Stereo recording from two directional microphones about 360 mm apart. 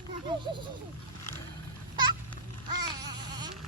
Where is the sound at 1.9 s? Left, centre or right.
Centre.